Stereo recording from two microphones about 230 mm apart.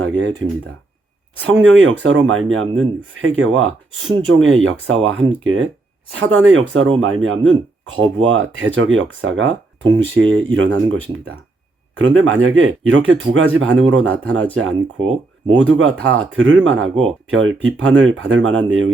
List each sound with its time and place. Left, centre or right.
0.0 s a sound: right
1.5 s speech: right
11.9 s speech: right